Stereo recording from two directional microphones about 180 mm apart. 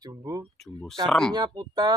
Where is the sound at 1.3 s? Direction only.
20° right (ahead or behind).